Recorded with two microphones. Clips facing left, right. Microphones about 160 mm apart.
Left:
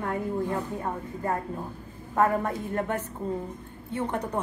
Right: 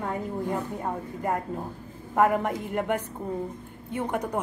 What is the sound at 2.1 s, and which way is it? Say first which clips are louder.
A woman's voice: right 2 dB; 15° right (ahead or behind).